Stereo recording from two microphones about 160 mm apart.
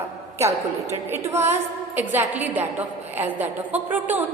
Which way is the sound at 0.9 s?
15° right (ahead or behind).